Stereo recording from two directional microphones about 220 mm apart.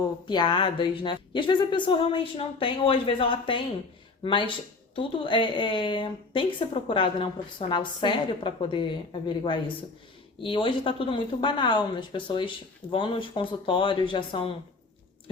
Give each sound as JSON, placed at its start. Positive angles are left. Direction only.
{"t": 0.3, "sound": "a woman's voice", "side_deg": 20}